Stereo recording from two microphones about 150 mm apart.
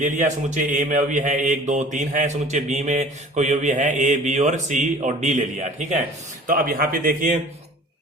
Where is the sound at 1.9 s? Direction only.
55° right (ahead or behind).